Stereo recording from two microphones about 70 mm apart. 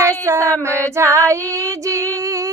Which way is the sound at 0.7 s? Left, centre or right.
Right.